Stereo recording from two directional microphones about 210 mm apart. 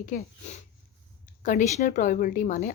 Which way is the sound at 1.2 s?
40° left (ahead or behind).